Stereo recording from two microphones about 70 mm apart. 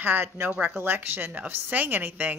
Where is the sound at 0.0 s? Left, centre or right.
Right.